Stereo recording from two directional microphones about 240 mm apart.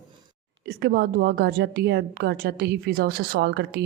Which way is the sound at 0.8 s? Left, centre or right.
Right.